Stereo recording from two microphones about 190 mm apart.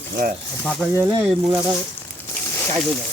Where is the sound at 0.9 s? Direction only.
10° right (ahead or behind).